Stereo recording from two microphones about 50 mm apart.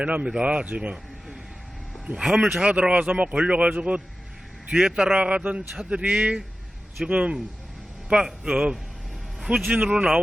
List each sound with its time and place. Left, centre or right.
0.0 s speech: right
2.2 s a man's voice: centre
2.6 s speech: right
3.1 s speech: right
3.3 s speech: right
4.8 s a man's voice: centre
5.1 s speech: right
9.5 s speech: right
9.8 s speech: centre